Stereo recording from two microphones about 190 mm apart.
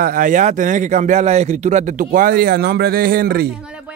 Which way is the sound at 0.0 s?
45° right (ahead or behind).